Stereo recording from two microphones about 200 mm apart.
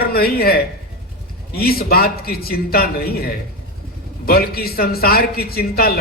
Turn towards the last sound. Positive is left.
turn(degrees=50)  # may be behind; listen again after turning